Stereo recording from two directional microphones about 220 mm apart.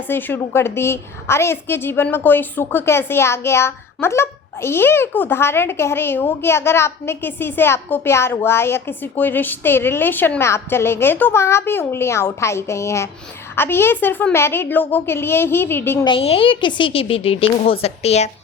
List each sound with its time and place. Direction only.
0.1 s a woman's voice: 10° left (ahead or behind)
16.0 s speech: 25° left (ahead or behind)